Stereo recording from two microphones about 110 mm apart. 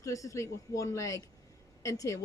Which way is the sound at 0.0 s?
30° left (ahead or behind).